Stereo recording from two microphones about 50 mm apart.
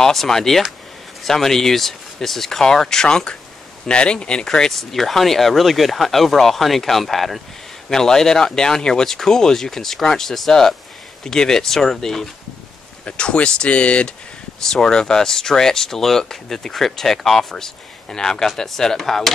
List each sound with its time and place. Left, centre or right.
0.0 s speech: centre
13.0 s speech: left
14.6 s speech: centre